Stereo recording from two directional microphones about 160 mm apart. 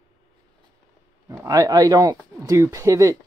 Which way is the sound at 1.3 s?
20° right (ahead or behind).